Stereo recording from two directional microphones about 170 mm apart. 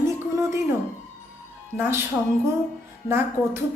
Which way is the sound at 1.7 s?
15° right (ahead or behind).